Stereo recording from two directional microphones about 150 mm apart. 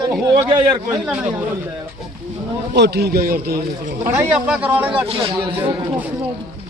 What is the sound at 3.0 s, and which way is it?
Speech, 85° right.